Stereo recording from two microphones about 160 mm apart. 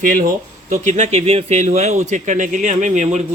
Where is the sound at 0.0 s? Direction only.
60° right (ahead or behind).